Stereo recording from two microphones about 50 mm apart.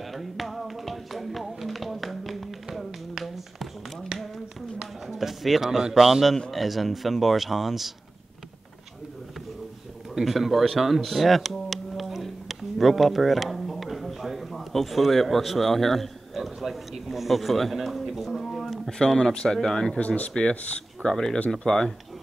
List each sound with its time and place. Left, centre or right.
0.0 s music: centre
5.0 s a man's voice: centre
10.1 s a sound: centre
19.1 s speech: centre
20.0 s speech: left
21.1 s speech: centre